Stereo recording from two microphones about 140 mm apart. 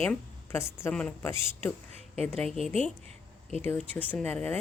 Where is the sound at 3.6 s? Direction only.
15° left (ahead or behind).